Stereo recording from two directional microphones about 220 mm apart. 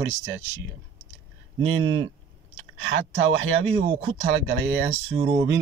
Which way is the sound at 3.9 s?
25° right (ahead or behind).